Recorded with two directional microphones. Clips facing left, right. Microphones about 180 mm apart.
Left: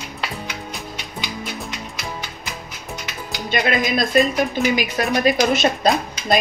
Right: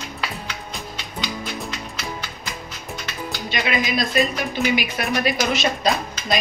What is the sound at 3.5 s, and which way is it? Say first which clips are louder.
Speech: left 4 dB; 50° left (ahead or behind).